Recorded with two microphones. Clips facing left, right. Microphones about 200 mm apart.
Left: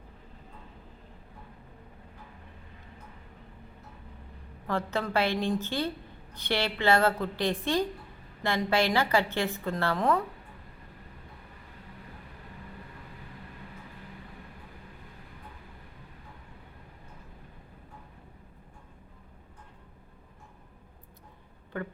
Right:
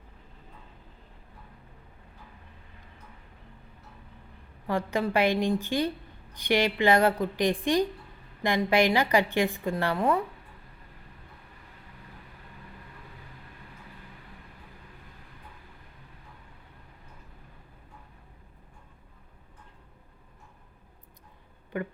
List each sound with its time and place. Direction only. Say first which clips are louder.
4.9 s a woman's voice: right 4 dB; 15° right (ahead or behind)
21.7 s speech: right 3 dB; 15° right (ahead or behind)